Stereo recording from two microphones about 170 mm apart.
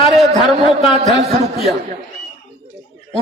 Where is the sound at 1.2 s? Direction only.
40° right (ahead or behind).